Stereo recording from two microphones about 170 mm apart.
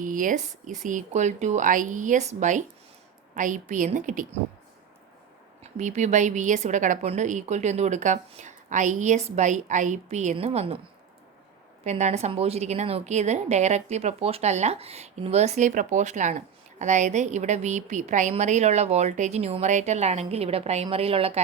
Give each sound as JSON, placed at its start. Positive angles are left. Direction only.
{"t": 0.0, "sound": "a woman's voice", "side_deg": -50}
{"t": 5.7, "sound": "a woman's voice", "side_deg": -45}
{"t": 11.8, "sound": "a woman's voice", "side_deg": -45}